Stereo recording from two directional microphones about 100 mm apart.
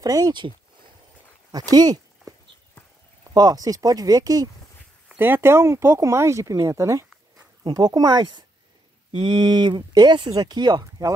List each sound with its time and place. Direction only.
0.0 s speech: 40° right (ahead or behind)
1.5 s speech: 40° right (ahead or behind)
3.3 s speech: 40° right (ahead or behind)
5.1 s speech: 20° right (ahead or behind); by 11.1 s 40° right (ahead or behind)